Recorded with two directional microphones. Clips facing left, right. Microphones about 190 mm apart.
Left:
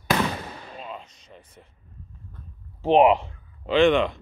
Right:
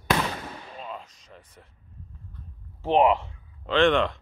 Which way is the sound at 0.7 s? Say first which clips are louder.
Even; centre (ahead or behind).